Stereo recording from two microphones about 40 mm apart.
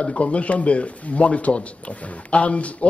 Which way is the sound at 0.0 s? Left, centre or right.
Left.